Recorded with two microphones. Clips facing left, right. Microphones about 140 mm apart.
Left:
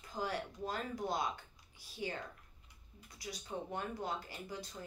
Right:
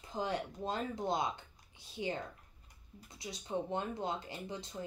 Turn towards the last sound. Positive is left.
turn(degrees=-25)  # may be behind; listen again after turning